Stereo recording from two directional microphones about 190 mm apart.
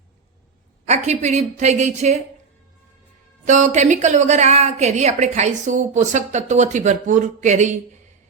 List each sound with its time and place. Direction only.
0.9 s a woman's voice: 35° right (ahead or behind)
3.4 s a woman's voice: 40° right (ahead or behind)